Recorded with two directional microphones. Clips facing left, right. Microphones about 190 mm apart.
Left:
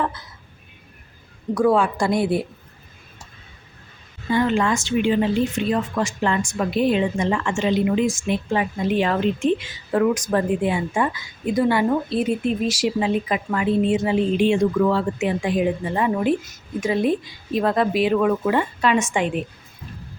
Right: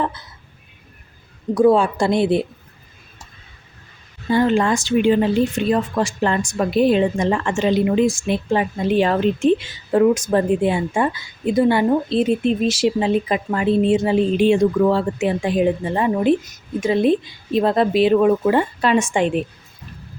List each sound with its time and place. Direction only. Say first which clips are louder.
1.5 s a woman's voice: right 4 dB; 25° right (ahead or behind)
4.3 s a woman's voice: right 3 dB; 35° right (ahead or behind)